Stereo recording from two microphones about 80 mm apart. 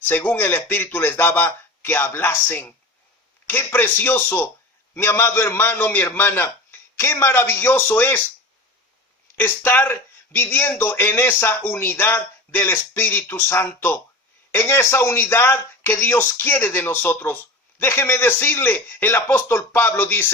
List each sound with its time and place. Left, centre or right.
0.1 s a man's voice: left
9.4 s a man's voice: left